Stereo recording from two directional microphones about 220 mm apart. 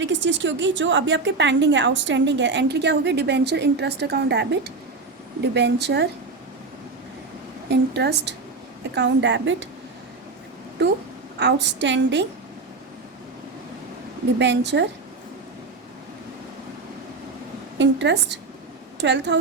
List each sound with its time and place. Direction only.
0.0 s a woman's voice: 55° right (ahead or behind)
7.7 s a woman's voice: 50° right (ahead or behind)
10.8 s a woman's voice: 50° right (ahead or behind)
14.3 s a woman's voice: 50° right (ahead or behind)
17.7 s a woman's voice: 50° right (ahead or behind)